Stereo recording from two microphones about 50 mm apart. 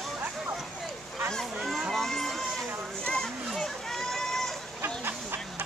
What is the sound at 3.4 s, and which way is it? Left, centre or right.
Run, centre.